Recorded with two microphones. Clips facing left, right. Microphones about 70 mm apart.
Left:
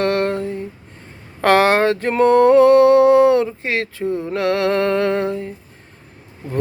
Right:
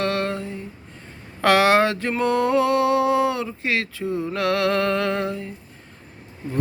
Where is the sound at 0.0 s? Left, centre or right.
Left.